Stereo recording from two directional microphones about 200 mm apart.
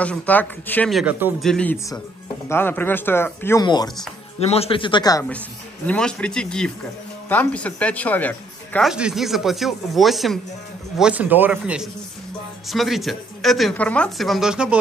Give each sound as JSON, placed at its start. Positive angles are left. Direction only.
{"t": 0.0, "sound": "a woman's voice", "side_deg": 5}
{"t": 5.9, "sound": "a woman's voice", "side_deg": 5}